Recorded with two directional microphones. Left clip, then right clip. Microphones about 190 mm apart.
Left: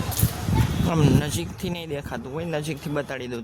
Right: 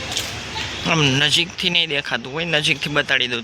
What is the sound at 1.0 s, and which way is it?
Speech, 5° left (ahead or behind).